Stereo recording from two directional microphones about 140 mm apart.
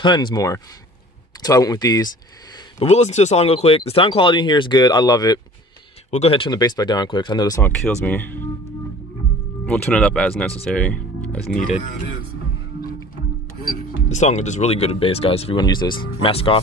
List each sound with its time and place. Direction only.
0.0 s speech: 35° left (ahead or behind)
2.8 s speech: 50° left (ahead or behind); by 5.4 s 25° left (ahead or behind)
6.0 s speech: 50° left (ahead or behind); by 7.6 s 30° left (ahead or behind)
7.6 s speech: 15° left (ahead or behind)
9.7 s speech: 5° left (ahead or behind)
14.0 s speech: 55° left (ahead or behind)
15.6 s speech: 30° left (ahead or behind)